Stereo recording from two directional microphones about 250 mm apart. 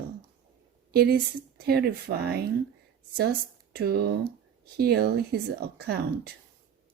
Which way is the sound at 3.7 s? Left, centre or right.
Right.